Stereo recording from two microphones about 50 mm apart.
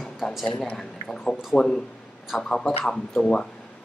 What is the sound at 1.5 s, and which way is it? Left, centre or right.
Speech, centre.